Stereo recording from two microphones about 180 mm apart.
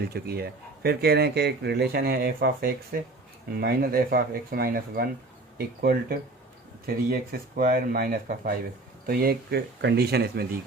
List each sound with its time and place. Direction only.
0.0 s speech: 60° right (ahead or behind)